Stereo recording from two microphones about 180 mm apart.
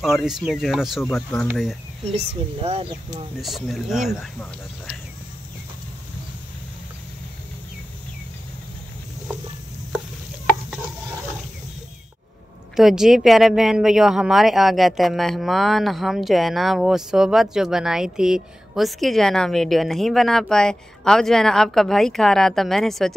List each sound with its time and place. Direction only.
0.0 s speech: centre (ahead or behind)
2.1 s speech: 35° right (ahead or behind)
3.3 s speech: centre (ahead or behind)
12.7 s speech: centre (ahead or behind)